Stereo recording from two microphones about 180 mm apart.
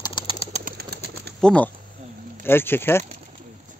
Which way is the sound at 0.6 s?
60° right (ahead or behind).